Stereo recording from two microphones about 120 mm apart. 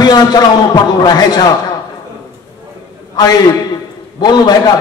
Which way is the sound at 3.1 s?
35° left (ahead or behind).